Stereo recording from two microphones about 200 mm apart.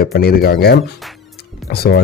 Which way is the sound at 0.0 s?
50° left (ahead or behind).